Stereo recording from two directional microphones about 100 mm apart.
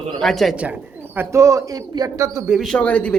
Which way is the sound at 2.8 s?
15° left (ahead or behind).